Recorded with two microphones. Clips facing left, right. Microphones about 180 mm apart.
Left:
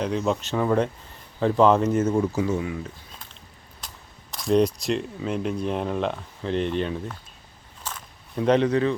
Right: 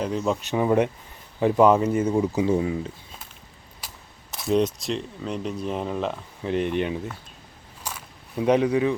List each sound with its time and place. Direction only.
0.0 s speech: centre (ahead or behind)
0.5 s speech: 15° right (ahead or behind)
2.5 s speech: 30° right (ahead or behind)
3.8 s speech: 5° right (ahead or behind)
7.9 s camera: 10° right (ahead or behind)